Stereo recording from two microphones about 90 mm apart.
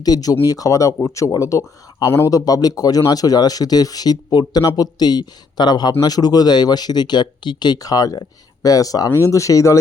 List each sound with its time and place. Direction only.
0.0 s speech: 45° left (ahead or behind); by 2.3 s 30° left (ahead or behind)
2.3 s speech: 45° left (ahead or behind)